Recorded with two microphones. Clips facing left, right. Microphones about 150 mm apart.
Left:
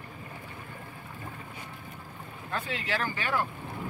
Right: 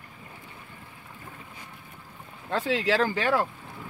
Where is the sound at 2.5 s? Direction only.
90° right.